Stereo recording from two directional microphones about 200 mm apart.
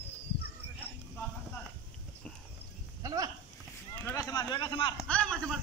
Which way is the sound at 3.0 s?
15° right (ahead or behind).